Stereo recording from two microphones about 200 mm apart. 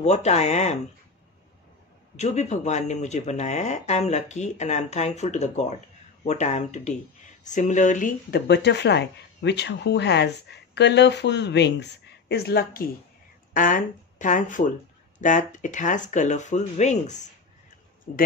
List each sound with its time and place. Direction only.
0.0 s speech: 35° left (ahead or behind)
2.1 s speech: 35° left (ahead or behind); by 12.8 s 50° left (ahead or behind)
13.5 s speech: 40° left (ahead or behind)